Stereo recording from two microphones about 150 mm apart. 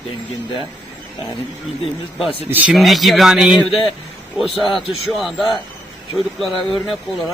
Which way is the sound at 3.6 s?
35° left (ahead or behind).